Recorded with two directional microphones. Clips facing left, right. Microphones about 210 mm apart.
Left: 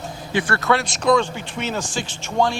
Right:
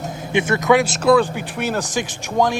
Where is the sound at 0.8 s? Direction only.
5° right (ahead or behind).